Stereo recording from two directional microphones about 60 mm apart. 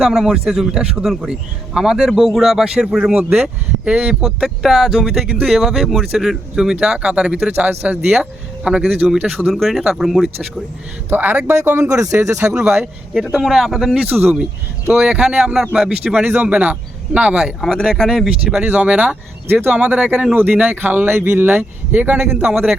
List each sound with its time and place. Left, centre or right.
0.0 s speech: centre
7.7 s speech: right
8.0 s speech: centre
11.1 s speech: right
11.6 s speech: right
11.9 s speech: right
12.1 s speech: right
12.5 s speech: centre
17.3 s speech: centre
18.6 s speech: right
19.5 s speech: right
19.7 s speech: right
22.5 s speech: centre